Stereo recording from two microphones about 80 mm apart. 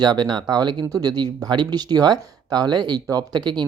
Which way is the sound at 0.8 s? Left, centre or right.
Right.